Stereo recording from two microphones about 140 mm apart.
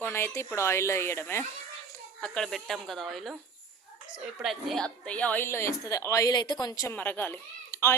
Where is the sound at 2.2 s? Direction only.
5° left (ahead or behind).